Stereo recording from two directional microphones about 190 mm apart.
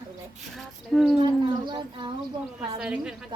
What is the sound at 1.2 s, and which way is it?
Speech, 25° right (ahead or behind).